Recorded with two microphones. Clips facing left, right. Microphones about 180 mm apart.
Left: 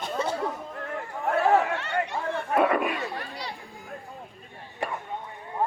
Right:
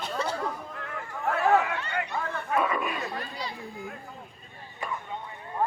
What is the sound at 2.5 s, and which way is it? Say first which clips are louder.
Chatter: left 4 dB; 60° left (ahead or behind).